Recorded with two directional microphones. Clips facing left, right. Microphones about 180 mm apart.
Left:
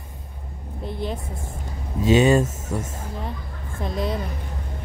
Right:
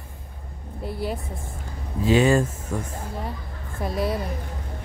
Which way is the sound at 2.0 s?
20° left (ahead or behind).